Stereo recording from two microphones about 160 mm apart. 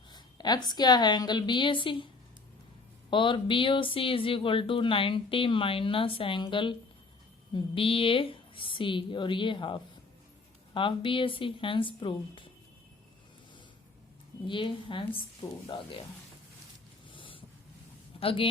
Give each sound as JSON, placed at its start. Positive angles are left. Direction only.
{"t": 0.1, "sound": "a woman's voice", "side_deg": 25}
{"t": 3.1, "sound": "speech", "side_deg": 30}
{"t": 14.4, "sound": "speech", "side_deg": 30}
{"t": 17.1, "sound": "a sound", "side_deg": 30}
{"t": 18.2, "sound": "speech", "side_deg": 35}